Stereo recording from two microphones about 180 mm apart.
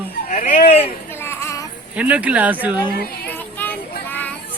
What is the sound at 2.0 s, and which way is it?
Speech, 5° right (ahead or behind).